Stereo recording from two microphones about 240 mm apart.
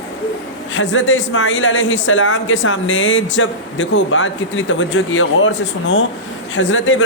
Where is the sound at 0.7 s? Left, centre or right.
Left.